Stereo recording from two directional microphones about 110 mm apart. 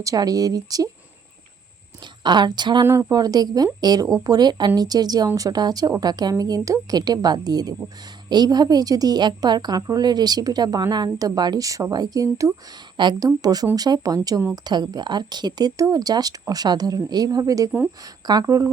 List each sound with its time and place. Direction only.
0.0 s a woman's voice: 30° right (ahead or behind)
2.2 s a woman's voice: 40° right (ahead or behind)
2.8 s speech: 25° right (ahead or behind)
3.1 s a woman's voice: 35° right (ahead or behind)